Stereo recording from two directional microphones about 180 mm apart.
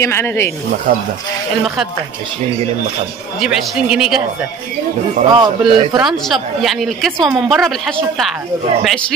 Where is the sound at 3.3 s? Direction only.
Centre (ahead or behind).